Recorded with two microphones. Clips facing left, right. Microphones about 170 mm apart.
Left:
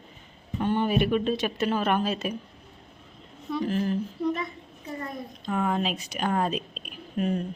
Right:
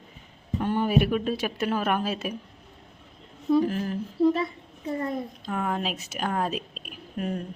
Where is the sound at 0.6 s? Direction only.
5° right (ahead or behind).